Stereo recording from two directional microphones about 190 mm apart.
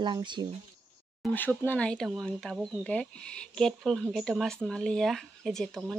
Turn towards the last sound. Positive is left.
turn(degrees=0)  # may be behind; listen again after turning